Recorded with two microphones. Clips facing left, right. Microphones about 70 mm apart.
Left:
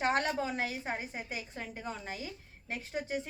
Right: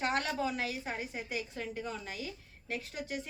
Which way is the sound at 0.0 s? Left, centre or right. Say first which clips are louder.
Left 2 dB; left.